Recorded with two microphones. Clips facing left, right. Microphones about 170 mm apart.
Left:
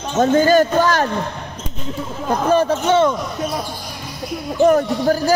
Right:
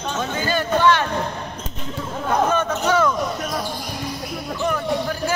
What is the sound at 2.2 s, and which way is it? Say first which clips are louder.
Speech: left 4 dB; 35° left (ahead or behind).